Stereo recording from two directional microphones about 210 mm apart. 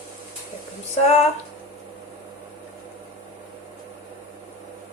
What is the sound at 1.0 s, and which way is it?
Speech, 30° left (ahead or behind).